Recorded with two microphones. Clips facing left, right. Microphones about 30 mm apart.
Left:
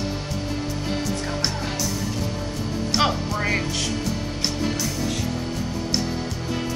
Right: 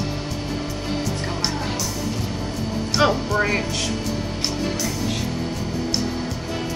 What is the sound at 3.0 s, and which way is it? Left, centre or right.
Speech, centre.